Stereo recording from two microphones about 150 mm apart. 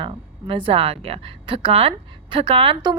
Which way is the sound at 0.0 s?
35° right (ahead or behind).